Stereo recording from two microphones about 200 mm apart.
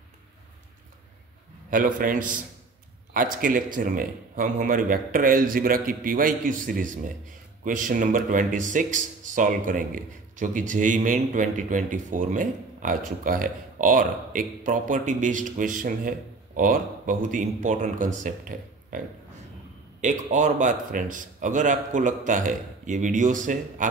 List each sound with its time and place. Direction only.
1.7 s speech: 40° right (ahead or behind)
20.0 s speech: 35° right (ahead or behind)